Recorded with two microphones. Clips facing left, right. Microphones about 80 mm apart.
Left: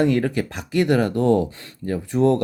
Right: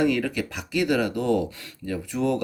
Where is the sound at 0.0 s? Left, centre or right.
Left.